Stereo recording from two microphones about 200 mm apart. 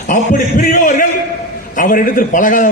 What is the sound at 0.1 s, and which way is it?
A man's voice, 40° left (ahead or behind).